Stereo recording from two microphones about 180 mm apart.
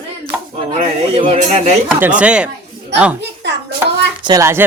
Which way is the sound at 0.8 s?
35° right (ahead or behind).